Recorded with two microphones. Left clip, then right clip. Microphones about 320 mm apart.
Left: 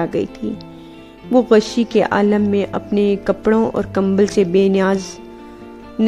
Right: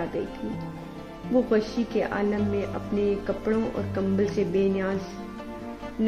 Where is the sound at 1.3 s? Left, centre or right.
Left.